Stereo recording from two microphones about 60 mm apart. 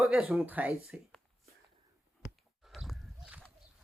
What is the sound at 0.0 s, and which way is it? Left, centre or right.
Speech, centre.